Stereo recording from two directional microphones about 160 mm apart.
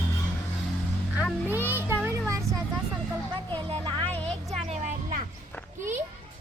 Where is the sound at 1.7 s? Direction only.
15° right (ahead or behind).